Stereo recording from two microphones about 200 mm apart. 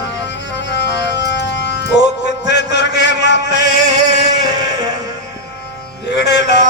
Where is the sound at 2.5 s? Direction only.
60° left (ahead or behind).